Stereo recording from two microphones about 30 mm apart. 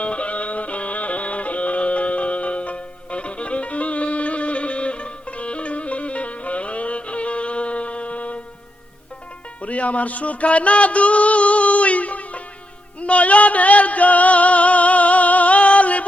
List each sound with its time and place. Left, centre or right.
0.0 s music: left
9.6 s music: left